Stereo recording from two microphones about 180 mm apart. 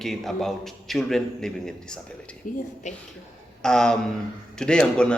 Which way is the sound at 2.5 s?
50° left (ahead or behind).